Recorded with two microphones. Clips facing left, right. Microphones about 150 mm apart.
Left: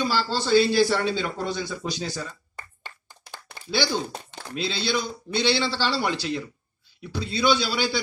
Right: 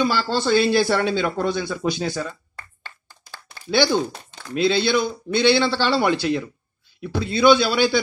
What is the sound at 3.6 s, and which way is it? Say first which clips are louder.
A man's voice: right 7 dB; 55° right (ahead or behind).